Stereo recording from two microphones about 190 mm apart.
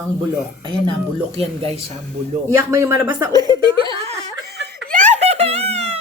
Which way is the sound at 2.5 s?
15° right (ahead or behind).